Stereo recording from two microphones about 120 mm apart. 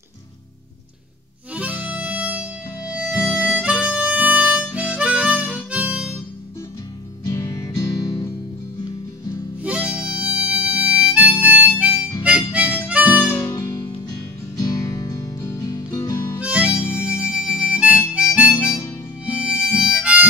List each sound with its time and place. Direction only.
1.5 s music: 10° right (ahead or behind)
2.9 s harmonica: 10° right (ahead or behind)
7.2 s music: 25° left (ahead or behind)
9.6 s harmonica: 10° right (ahead or behind)
13.3 s music: 20° left (ahead or behind)
16.3 s harmonica: 10° right (ahead or behind)
18.5 s harmonica: 20° left (ahead or behind)
19.4 s harmonica: 10° right (ahead or behind)